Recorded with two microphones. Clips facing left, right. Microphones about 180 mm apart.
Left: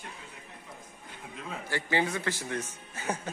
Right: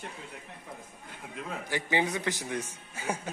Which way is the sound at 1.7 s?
15° right (ahead or behind).